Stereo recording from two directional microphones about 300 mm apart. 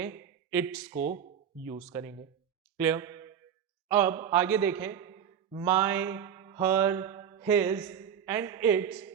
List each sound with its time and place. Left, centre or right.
0.0 s speech: centre
0.9 s a man's voice: right
2.7 s a sound: centre
3.8 s a man's voice: centre
5.6 s mantra: centre